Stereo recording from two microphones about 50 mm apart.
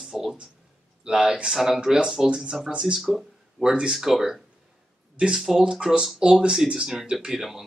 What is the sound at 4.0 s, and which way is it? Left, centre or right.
Speech, centre.